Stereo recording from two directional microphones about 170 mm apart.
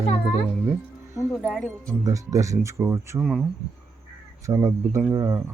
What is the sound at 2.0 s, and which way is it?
Speech, 20° right (ahead or behind).